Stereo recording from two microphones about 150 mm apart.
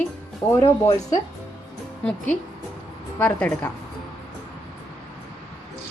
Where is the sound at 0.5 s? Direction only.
25° left (ahead or behind).